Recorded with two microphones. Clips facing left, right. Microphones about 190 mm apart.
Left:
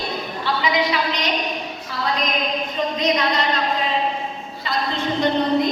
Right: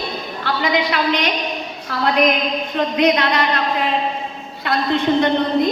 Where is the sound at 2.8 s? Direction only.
65° right (ahead or behind).